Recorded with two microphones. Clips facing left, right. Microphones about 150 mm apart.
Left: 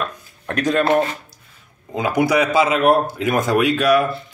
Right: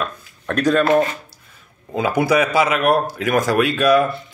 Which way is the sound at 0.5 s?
20° left (ahead or behind).